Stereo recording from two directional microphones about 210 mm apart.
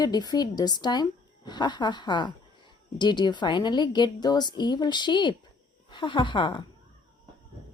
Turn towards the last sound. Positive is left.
turn(degrees=20)  # may be behind; listen again after turning